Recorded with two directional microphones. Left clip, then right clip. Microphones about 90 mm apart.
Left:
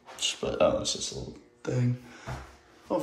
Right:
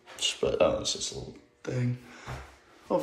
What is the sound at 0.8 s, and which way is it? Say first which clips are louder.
Speech: even; 55° left (ahead or behind).